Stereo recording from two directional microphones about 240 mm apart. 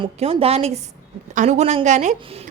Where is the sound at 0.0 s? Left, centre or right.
Right.